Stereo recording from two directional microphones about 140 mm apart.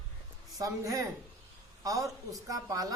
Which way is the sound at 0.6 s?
25° right (ahead or behind).